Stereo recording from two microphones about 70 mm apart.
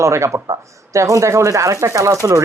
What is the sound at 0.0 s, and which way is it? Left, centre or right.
Speech, right.